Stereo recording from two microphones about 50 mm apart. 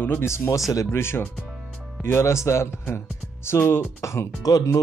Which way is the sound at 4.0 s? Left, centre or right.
Left.